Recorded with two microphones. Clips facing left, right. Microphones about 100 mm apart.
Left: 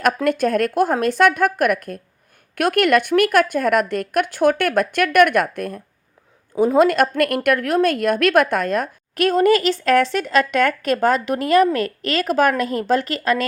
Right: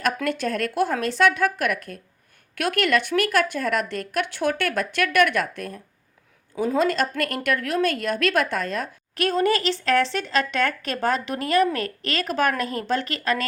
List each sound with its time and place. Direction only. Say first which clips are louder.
0.3 s a woman's voice: left 7 dB; 50° left (ahead or behind)